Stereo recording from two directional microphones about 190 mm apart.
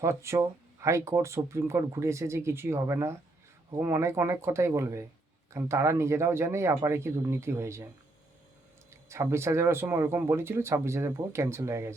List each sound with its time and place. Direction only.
0.0 s speech: 15° right (ahead or behind)
8.9 s speech: 15° right (ahead or behind)